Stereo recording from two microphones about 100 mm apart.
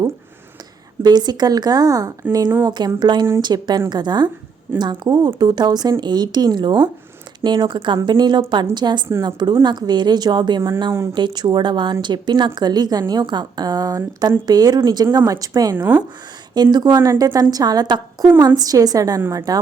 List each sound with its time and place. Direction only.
1.0 s a woman's voice: 45° right (ahead or behind)
15.9 s speech: 20° right (ahead or behind)
16.6 s a woman's voice: 45° right (ahead or behind)
17.0 s a woman's voice: 30° right (ahead or behind)